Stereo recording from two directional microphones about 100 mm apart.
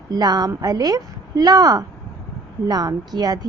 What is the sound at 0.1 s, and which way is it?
Speech, 40° right (ahead or behind).